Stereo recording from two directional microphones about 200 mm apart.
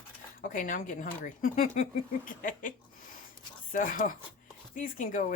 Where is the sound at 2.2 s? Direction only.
40° left (ahead or behind).